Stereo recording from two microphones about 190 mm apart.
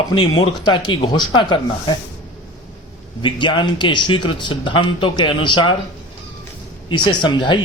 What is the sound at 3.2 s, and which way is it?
Speech, 25° left (ahead or behind).